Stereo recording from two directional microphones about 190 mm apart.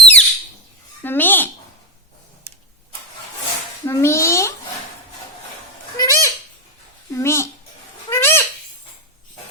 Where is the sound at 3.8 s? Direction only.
15° left (ahead or behind).